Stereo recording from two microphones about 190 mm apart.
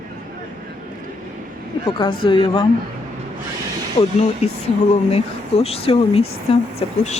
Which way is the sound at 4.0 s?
30° left (ahead or behind).